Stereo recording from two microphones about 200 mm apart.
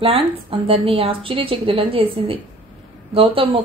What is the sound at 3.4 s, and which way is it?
Speech, 30° right (ahead or behind).